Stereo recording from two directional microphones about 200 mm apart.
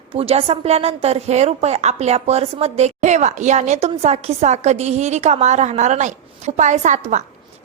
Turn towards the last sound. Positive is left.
turn(degrees=-35)  # may be behind; listen again after turning